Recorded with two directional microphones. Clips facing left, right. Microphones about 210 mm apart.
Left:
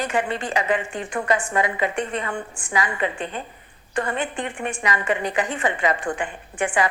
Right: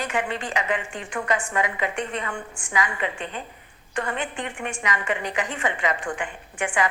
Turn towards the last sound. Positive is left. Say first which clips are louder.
# left 3 dB
turn(degrees=35)  # may be behind; listen again after turning